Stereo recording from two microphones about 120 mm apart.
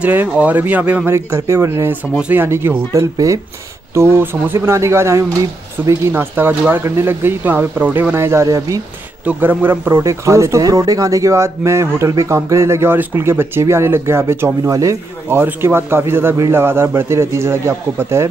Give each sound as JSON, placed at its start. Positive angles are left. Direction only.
{"t": 0.0, "sound": "speech", "side_deg": -15}
{"t": 1.1, "sound": "a man's voice", "side_deg": -20}
{"t": 9.2, "sound": "a man's voice", "side_deg": -15}